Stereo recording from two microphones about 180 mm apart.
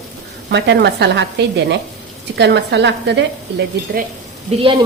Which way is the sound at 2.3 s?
70° right (ahead or behind).